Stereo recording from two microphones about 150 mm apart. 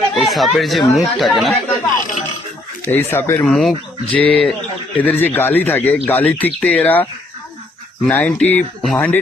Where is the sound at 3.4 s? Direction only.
Centre (ahead or behind).